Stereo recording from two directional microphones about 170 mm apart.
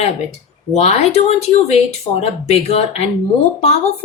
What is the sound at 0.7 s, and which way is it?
A woman's voice, 40° left (ahead or behind).